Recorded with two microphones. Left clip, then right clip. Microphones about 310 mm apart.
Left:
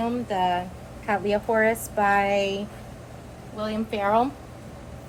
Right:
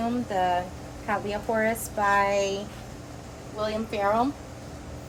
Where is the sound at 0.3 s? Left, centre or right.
Left.